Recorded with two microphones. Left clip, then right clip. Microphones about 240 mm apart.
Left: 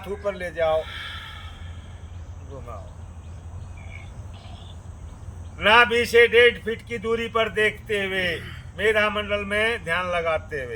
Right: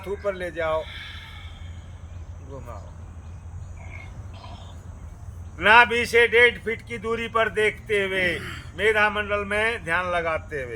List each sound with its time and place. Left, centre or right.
0.3 s speech: centre
0.8 s a sound: centre
5.5 s speech: centre
8.4 s speech: right
8.7 s speech: centre